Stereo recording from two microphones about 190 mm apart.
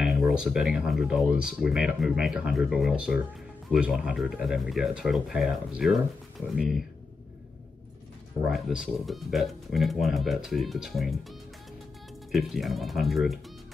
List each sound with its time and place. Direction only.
0.0 s speech: centre (ahead or behind)
8.5 s speech: centre (ahead or behind)
12.3 s speech: centre (ahead or behind)